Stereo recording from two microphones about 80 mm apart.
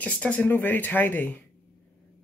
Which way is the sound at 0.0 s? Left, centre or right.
Centre.